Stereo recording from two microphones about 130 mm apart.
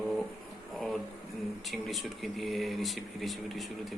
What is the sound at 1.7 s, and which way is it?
Speech, centre (ahead or behind).